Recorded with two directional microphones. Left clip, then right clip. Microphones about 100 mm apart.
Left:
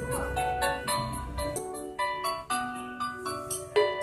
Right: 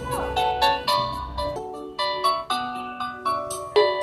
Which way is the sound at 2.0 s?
30° right (ahead or behind).